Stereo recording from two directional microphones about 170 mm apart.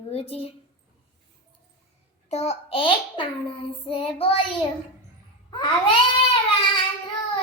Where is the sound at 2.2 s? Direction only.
40° left (ahead or behind).